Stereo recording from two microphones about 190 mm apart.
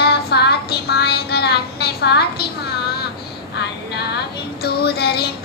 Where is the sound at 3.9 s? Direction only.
60° left (ahead or behind).